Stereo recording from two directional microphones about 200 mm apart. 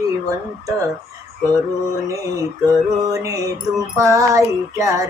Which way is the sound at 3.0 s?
15° right (ahead or behind).